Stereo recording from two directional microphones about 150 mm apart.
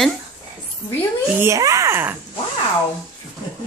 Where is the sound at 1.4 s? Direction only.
20° right (ahead or behind).